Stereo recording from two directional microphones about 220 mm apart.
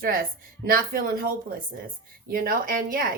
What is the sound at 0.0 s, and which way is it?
A woman's voice, 40° right (ahead or behind).